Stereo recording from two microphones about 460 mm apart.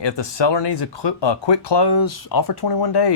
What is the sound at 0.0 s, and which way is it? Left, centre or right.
Speech, left.